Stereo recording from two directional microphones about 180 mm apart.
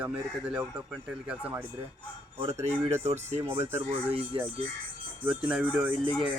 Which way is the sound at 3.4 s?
10° right (ahead or behind).